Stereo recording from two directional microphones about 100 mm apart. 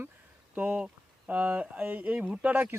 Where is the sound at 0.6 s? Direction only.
15° right (ahead or behind).